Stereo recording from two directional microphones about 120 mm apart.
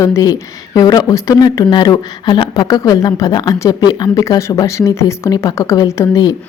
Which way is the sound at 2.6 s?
30° left (ahead or behind).